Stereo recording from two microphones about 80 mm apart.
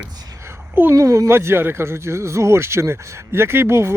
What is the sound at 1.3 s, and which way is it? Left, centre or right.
Speech, right.